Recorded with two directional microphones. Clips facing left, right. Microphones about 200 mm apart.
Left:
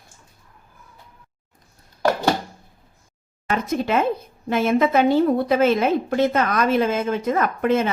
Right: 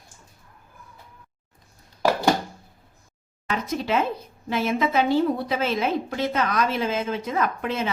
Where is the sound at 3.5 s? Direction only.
50° left (ahead or behind).